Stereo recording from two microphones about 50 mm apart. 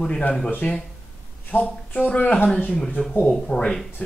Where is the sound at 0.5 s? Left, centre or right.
Left.